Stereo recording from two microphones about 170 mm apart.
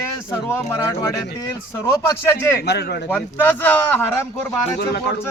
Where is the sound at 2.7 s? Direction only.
70° left (ahead or behind).